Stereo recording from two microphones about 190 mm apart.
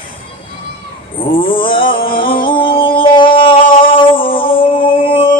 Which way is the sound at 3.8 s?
25° left (ahead or behind).